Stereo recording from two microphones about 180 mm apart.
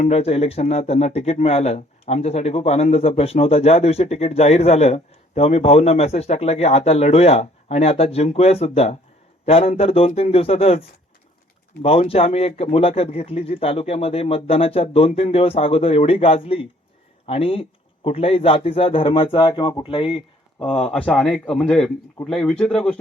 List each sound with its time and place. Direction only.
0.0 s speech: 35° left (ahead or behind)
20.7 s a man's voice: 5° left (ahead or behind)